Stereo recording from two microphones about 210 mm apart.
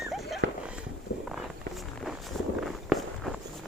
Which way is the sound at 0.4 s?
60° right (ahead or behind).